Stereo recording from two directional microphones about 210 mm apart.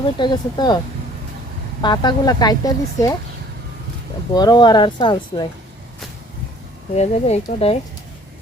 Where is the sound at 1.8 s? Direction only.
20° left (ahead or behind).